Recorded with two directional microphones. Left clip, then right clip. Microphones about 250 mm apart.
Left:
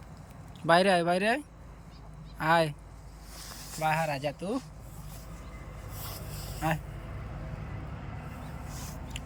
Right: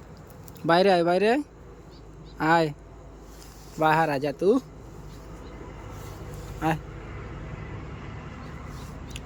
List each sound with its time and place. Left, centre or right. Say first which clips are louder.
0.7 s speech: right 3 dB; centre
3.8 s speech: right 7 dB; right
6.6 s speech: right 4 dB; centre